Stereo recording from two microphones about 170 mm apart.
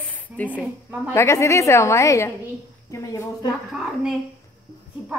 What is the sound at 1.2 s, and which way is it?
A woman's voice, 15° left (ahead or behind).